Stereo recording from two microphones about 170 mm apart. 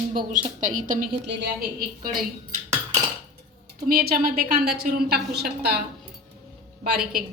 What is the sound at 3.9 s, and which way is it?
Speech, 55° right (ahead or behind).